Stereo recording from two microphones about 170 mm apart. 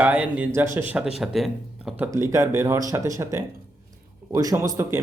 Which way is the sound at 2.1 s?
15° right (ahead or behind).